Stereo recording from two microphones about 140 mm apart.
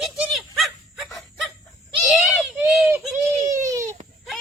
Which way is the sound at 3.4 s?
20° right (ahead or behind).